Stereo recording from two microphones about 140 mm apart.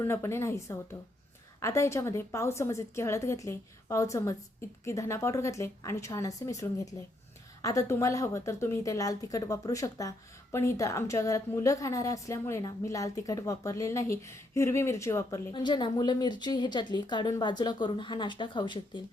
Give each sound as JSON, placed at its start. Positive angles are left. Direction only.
{"t": 0.0, "sound": "a woman's voice", "side_deg": 20}
{"t": 15.6, "sound": "a woman's voice", "side_deg": 35}